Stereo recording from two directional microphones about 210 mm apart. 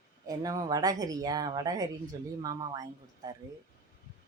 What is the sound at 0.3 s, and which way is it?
A woman's voice, 15° right (ahead or behind).